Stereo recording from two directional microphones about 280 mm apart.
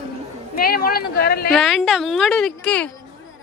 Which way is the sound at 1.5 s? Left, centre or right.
Centre.